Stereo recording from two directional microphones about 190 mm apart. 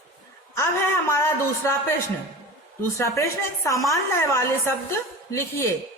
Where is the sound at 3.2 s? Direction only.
15° left (ahead or behind).